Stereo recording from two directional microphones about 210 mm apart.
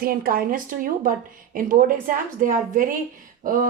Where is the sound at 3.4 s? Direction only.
40° right (ahead or behind).